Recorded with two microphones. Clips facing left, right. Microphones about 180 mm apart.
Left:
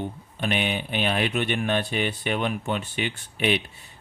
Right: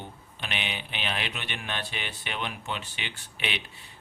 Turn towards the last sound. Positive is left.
turn(degrees=45)  # may be behind; listen again after turning